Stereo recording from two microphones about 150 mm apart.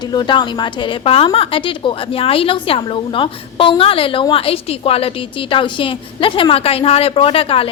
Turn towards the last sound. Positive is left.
turn(degrees=40)  # may be behind; listen again after turning